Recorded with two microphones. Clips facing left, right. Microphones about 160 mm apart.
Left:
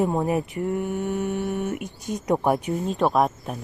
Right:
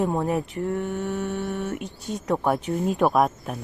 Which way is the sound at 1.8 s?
45° left (ahead or behind).